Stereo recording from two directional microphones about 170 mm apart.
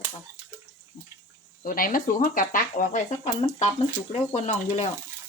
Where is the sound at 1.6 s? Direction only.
55° left (ahead or behind); by 4.8 s 40° left (ahead or behind).